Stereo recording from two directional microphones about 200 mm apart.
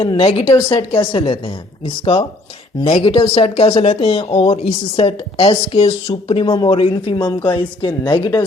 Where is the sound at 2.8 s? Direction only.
25° left (ahead or behind).